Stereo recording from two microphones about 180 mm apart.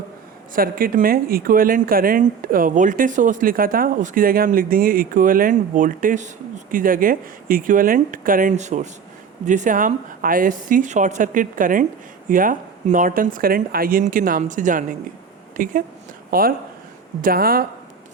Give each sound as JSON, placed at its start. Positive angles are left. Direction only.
{"t": 0.5, "sound": "speech", "side_deg": -50}